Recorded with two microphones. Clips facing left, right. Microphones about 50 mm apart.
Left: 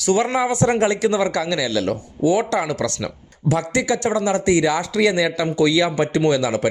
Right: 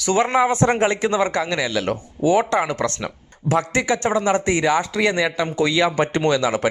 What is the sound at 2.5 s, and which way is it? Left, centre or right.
Speech, right.